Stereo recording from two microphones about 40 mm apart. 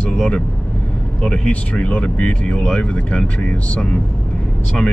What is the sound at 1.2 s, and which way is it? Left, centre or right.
Speech, left.